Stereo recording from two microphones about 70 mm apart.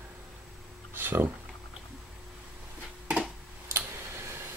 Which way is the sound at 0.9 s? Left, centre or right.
Right.